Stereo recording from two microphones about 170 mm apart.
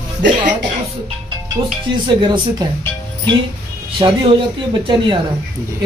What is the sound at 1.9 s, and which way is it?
Speech, 25° right (ahead or behind).